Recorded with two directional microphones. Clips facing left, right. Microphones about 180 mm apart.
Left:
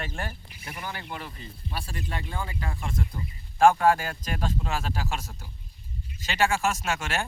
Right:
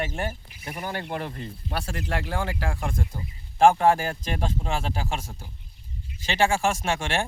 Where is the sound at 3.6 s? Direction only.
25° right (ahead or behind).